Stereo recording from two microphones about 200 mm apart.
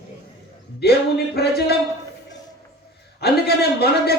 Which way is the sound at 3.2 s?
55° left (ahead or behind).